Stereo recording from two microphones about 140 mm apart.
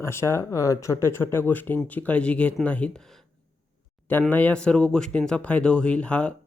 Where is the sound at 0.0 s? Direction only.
20° left (ahead or behind).